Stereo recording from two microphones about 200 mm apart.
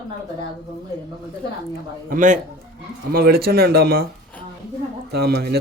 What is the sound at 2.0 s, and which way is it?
A man's voice, 40° right (ahead or behind).